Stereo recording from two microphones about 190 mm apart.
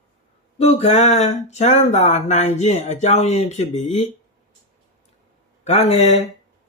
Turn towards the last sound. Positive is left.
turn(degrees=35)  # may be behind; listen again after turning